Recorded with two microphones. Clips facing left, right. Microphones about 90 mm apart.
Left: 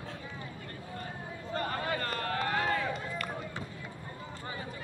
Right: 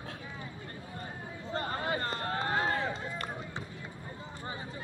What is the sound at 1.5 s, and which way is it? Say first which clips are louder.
Run: even; 25° right (ahead or behind).